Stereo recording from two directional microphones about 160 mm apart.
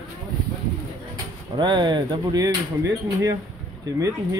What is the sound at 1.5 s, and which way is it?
Speech, 30° right (ahead or behind).